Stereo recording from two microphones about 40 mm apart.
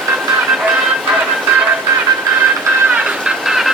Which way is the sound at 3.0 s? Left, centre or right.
Centre.